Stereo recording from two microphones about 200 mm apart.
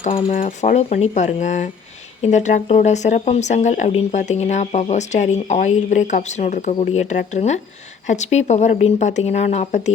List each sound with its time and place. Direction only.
0.0 s speech: 30° left (ahead or behind)
0.3 s speech: 40° left (ahead or behind)